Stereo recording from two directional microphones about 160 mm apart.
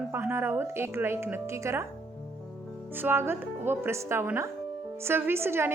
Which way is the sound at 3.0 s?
15° right (ahead or behind).